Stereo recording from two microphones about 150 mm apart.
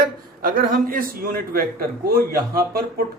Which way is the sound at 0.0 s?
70° right (ahead or behind).